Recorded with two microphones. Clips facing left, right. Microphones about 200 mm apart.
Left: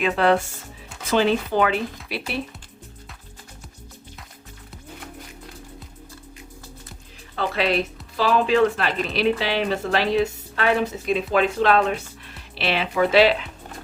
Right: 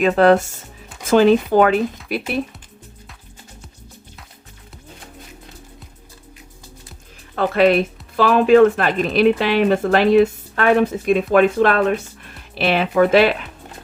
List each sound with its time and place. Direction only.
0.0 s speech: 45° right (ahead or behind)
7.3 s speech: 50° right (ahead or behind)